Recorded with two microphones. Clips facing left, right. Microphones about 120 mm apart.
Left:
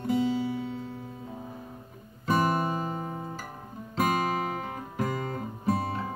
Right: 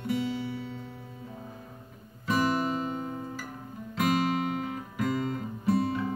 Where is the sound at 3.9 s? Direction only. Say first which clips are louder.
Even; 40° left (ahead or behind).